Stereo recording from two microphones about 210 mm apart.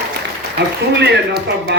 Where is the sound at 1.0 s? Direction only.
50° right (ahead or behind).